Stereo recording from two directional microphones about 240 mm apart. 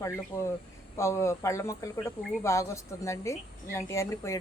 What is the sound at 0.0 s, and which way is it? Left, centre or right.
Speech, centre.